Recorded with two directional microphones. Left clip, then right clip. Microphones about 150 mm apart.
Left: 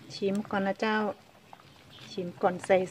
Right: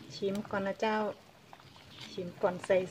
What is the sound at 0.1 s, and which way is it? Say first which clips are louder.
Speech: left 4 dB; 55° left (ahead or behind).